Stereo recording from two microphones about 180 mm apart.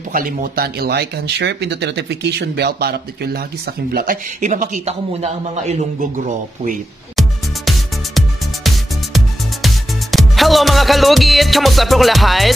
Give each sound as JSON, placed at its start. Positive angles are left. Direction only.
{"t": 0.1, "sound": "speech", "side_deg": -50}
{"t": 7.2, "sound": "music", "side_deg": 0}